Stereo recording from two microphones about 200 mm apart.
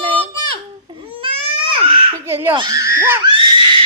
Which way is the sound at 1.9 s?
25° right (ahead or behind).